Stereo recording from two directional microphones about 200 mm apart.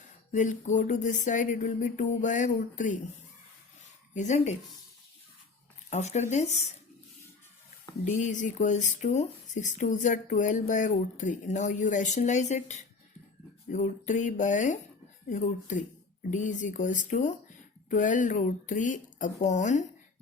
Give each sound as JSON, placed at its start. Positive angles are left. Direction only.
{"t": 0.3, "sound": "speech", "side_deg": 40}
{"t": 4.1, "sound": "speech", "side_deg": 35}
{"t": 5.9, "sound": "speech", "side_deg": 35}
{"t": 8.2, "sound": "speech", "side_deg": 40}